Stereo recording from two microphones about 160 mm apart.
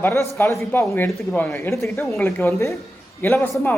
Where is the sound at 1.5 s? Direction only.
15° left (ahead or behind).